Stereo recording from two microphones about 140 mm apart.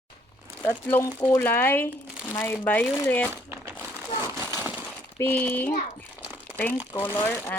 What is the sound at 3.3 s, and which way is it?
Crumpling, 15° right (ahead or behind).